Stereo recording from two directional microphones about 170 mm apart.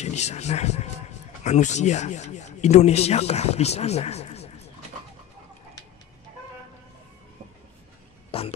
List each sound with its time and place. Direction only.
0.0 s speech: 40° left (ahead or behind)
8.3 s cough: 35° left (ahead or behind)